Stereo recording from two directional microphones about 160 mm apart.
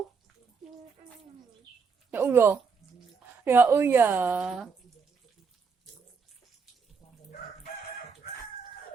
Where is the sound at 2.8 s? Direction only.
Centre (ahead or behind).